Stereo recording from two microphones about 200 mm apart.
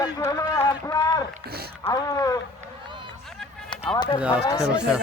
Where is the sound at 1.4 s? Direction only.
50° right (ahead or behind).